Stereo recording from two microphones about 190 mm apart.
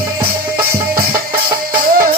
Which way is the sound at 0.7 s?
50° right (ahead or behind).